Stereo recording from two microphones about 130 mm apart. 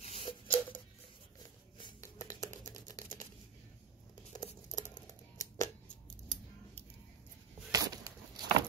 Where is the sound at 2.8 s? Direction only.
30° left (ahead or behind).